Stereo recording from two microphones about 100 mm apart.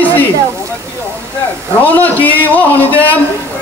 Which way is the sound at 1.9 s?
15° left (ahead or behind).